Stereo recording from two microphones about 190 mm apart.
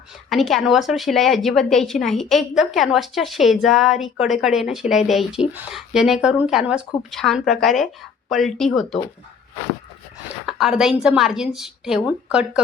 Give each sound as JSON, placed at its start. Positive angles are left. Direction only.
{"t": 0.3, "sound": "a woman's voice", "side_deg": 0}
{"t": 10.4, "sound": "a woman's voice", "side_deg": 0}